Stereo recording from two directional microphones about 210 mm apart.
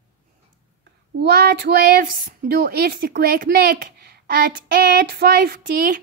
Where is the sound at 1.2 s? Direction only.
50° right (ahead or behind).